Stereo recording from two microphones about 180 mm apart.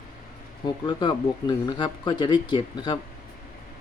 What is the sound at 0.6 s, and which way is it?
Speech, 25° left (ahead or behind).